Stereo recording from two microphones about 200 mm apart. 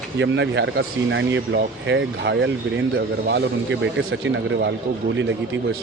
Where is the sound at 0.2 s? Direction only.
65° right (ahead or behind).